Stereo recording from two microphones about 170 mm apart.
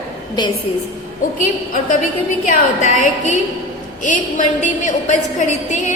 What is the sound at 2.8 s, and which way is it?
A woman's voice, 45° left (ahead or behind).